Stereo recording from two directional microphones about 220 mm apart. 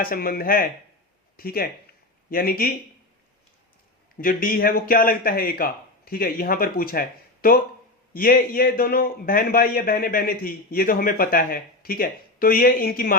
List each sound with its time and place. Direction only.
0.0 s a man's voice: 40° left (ahead or behind)
4.2 s a man's voice: 40° left (ahead or behind)
8.1 s a man's voice: 40° left (ahead or behind)